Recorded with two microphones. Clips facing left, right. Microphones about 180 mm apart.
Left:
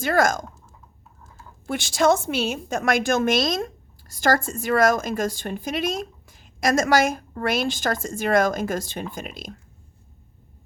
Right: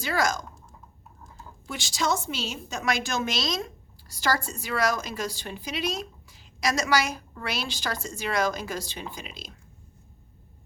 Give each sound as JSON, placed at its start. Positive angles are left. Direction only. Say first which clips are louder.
{"t": 0.0, "sound": "a woman's voice", "louder": "left 6 dB", "side_deg": 50}
{"t": 1.6, "sound": "a woman's voice", "louder": "left 9 dB", "side_deg": 55}